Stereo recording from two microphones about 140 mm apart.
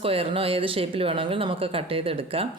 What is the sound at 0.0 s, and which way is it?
Speech, 40° right (ahead or behind).